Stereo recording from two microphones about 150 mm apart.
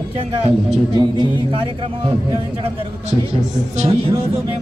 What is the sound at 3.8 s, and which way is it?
Speech, 40° right (ahead or behind).